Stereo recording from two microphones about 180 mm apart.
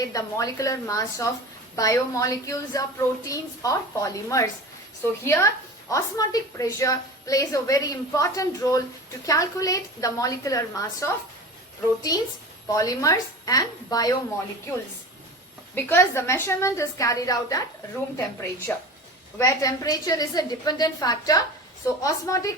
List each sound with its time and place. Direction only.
0.0 s a woman's voice: 20° left (ahead or behind)
12.1 s a woman's voice: 20° left (ahead or behind)
15.7 s a woman's voice: 10° left (ahead or behind)
18.7 s a woman's voice: 10° left (ahead or behind)